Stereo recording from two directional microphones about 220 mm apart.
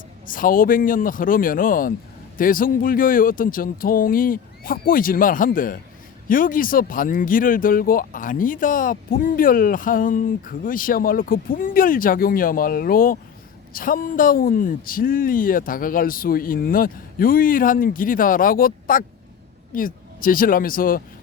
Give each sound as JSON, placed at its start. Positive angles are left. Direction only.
{"t": 0.3, "sound": "speech", "side_deg": 40}